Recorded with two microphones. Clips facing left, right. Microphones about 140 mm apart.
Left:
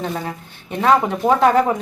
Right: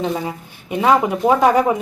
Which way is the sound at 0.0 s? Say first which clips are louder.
Right 3 dB; 10° right (ahead or behind).